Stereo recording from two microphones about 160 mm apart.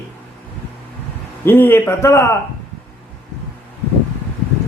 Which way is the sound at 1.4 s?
15° left (ahead or behind).